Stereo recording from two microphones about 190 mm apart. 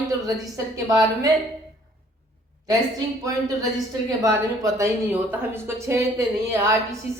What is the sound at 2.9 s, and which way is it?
A woman's voice, 20° right (ahead or behind).